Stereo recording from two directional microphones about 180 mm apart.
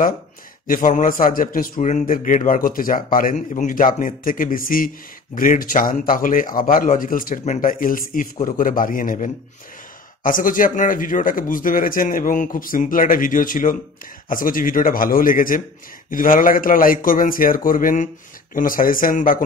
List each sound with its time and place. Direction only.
0.7 s a man's voice: 45° left (ahead or behind)